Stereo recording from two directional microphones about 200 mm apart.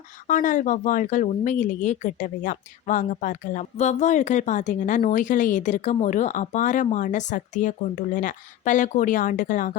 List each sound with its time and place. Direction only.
0.3 s speech: 40° left (ahead or behind)